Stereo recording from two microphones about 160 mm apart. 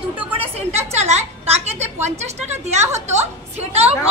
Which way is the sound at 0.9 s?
45° right (ahead or behind).